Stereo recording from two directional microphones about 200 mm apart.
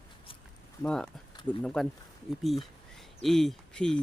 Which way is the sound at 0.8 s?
5° left (ahead or behind).